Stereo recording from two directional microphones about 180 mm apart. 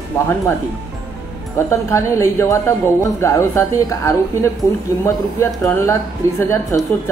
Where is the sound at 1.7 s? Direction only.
15° left (ahead or behind).